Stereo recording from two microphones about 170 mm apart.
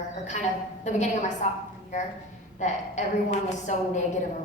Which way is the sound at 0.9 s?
45° left (ahead or behind).